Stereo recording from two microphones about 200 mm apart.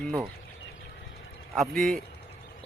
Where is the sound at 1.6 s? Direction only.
Centre (ahead or behind).